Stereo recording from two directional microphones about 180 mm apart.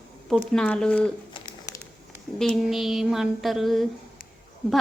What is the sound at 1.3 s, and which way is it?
Crumpling, 20° left (ahead or behind).